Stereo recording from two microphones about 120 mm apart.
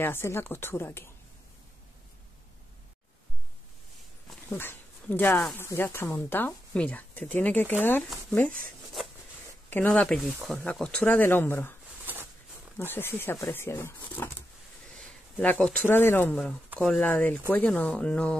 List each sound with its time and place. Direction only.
0.0 s speech: 20° left (ahead or behind)
4.5 s speech: 20° left (ahead or behind)
9.7 s speech: 15° left (ahead or behind)
12.7 s speech: 20° left (ahead or behind)
15.0 s a sound: 10° left (ahead or behind)
15.9 s speech: 20° left (ahead or behind)
16.8 s speech: centre (ahead or behind)
17.1 s speech: 15° left (ahead or behind)